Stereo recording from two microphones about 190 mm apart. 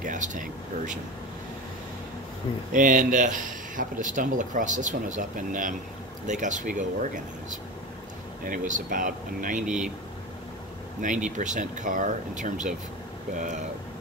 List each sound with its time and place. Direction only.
0.0 s speech: 40° right (ahead or behind)
2.7 s speech: 45° right (ahead or behind)
8.5 s speech: 45° right (ahead or behind)
11.2 s speech: 40° right (ahead or behind)